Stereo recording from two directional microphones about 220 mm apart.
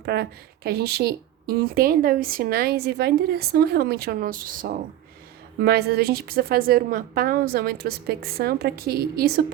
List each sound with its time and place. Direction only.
0.0 s a woman's voice: 45° right (ahead or behind)